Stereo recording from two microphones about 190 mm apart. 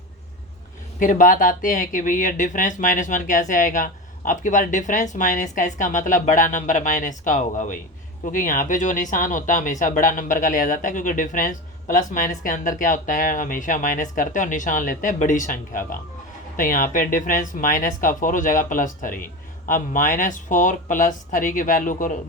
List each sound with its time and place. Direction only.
0.9 s speech: 45° left (ahead or behind)